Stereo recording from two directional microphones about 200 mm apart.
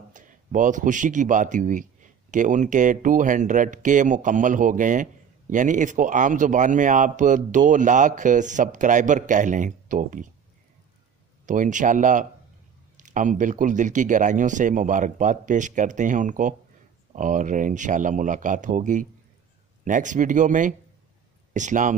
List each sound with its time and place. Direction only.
0.1 s speech: 40° right (ahead or behind)
11.4 s speech: 40° right (ahead or behind)